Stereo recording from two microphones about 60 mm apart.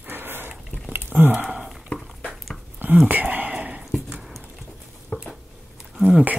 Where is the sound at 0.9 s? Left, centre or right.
Right.